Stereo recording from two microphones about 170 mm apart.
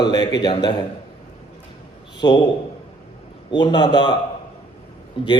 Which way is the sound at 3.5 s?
25° left (ahead or behind).